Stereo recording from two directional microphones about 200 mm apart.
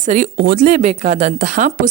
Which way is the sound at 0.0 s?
40° right (ahead or behind).